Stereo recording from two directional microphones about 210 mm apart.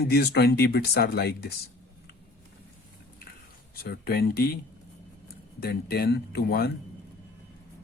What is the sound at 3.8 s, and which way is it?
Speech, 45° left (ahead or behind).